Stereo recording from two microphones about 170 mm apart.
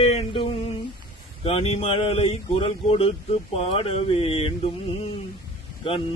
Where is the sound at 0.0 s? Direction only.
35° left (ahead or behind).